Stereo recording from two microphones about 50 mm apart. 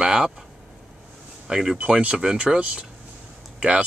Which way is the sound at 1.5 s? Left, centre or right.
Centre.